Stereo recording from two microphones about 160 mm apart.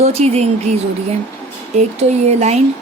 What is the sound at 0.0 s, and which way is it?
Speech, 40° right (ahead or behind).